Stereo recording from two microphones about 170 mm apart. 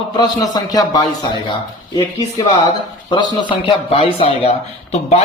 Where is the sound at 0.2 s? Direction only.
20° left (ahead or behind).